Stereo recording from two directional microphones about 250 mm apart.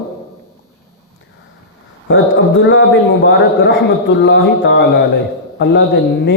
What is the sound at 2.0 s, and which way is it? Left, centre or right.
A man's voice, left.